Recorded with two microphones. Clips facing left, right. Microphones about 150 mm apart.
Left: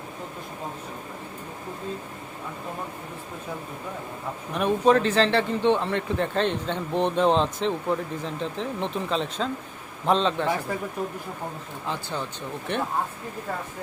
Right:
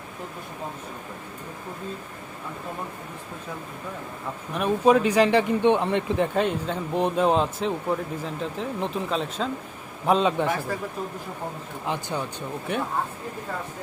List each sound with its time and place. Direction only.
4.5 s speech: 5° right (ahead or behind)
11.9 s speech: 15° right (ahead or behind)